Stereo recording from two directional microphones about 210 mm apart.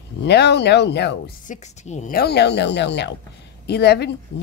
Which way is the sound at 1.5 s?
35° left (ahead or behind).